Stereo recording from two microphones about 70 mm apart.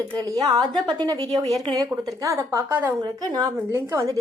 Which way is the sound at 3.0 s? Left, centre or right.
Right.